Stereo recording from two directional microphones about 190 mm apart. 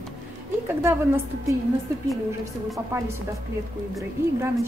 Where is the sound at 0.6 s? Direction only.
15° right (ahead or behind).